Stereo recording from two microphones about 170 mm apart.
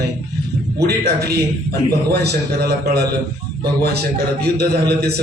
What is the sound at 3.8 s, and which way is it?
A man's voice, 65° right (ahead or behind).